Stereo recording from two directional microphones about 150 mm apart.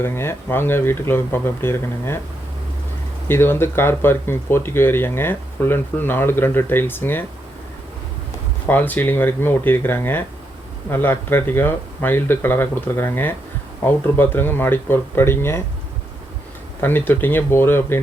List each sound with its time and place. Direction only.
0.0 s speech: 15° left (ahead or behind)
3.2 s speech: 15° left (ahead or behind)
8.6 s speech: 10° left (ahead or behind)
17.1 s speech: 15° left (ahead or behind)